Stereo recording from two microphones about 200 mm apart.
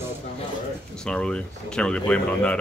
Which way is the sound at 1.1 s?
5° left (ahead or behind).